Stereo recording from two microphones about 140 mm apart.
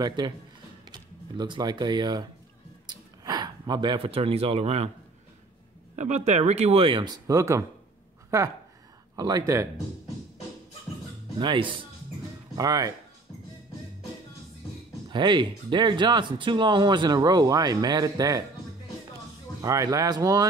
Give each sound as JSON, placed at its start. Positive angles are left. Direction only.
{"t": 0.0, "sound": "speech", "side_deg": -30}
{"t": 5.9, "sound": "speech", "side_deg": -55}
{"t": 7.2, "sound": "speech", "side_deg": -25}
{"t": 9.1, "sound": "speech", "side_deg": -30}
{"t": 11.3, "sound": "speech", "side_deg": -35}
{"t": 15.0, "sound": "speech", "side_deg": -35}
{"t": 19.6, "sound": "speech", "side_deg": -25}